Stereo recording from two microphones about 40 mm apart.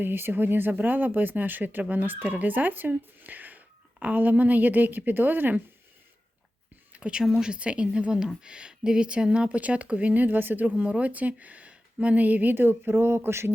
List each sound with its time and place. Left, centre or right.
0.0 s speech: right
0.7 s speech: right
7.0 s speech: right
7.3 s speech: centre
7.6 s speech: right
9.6 s speech: right
10.2 s speech: right
10.8 s speech: right
11.1 s speech: right
12.5 s a sound: right